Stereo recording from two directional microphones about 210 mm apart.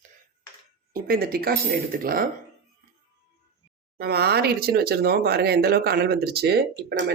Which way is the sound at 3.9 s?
50° right (ahead or behind).